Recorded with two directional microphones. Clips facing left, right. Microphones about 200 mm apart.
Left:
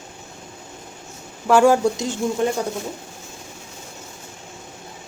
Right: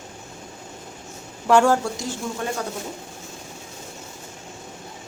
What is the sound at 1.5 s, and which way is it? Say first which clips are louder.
Speech: left 3 dB; 5° left (ahead or behind).